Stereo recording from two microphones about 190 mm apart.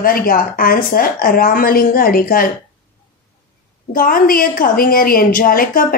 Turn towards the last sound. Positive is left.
turn(degrees=50)  # may be behind; listen again after turning